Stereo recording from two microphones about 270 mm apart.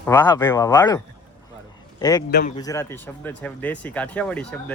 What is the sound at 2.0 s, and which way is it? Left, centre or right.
Speech, centre.